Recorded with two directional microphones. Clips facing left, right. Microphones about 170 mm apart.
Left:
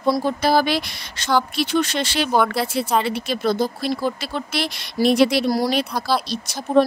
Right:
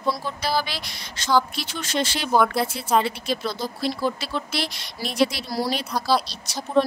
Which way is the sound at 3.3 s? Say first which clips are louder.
Left 6 dB; 50° left (ahead or behind).